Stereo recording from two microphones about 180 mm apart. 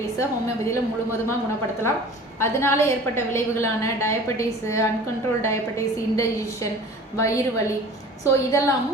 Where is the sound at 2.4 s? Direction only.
15° left (ahead or behind).